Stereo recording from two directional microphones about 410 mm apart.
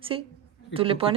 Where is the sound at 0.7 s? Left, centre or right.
Centre.